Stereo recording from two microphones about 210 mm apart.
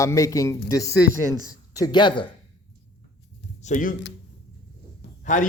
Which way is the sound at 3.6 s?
40° left (ahead or behind).